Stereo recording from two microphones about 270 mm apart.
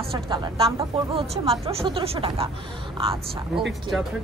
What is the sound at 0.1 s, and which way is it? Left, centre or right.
A woman's voice, centre.